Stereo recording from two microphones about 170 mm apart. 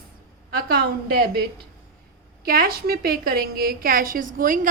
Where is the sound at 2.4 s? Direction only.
60° right (ahead or behind).